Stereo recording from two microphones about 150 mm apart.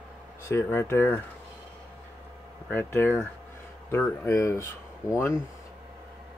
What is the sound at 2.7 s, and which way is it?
Speech, 15° left (ahead or behind).